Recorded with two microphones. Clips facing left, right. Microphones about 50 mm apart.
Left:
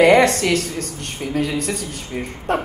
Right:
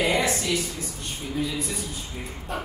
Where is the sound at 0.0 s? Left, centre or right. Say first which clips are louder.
Left 11 dB; left.